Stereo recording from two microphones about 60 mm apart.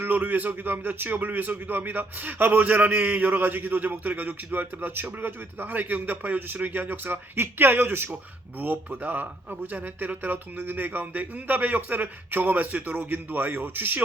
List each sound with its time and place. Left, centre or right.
0.0 s a man's voice: right